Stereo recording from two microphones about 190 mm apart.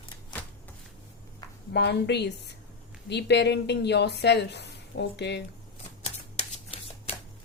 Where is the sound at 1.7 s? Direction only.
60° left (ahead or behind).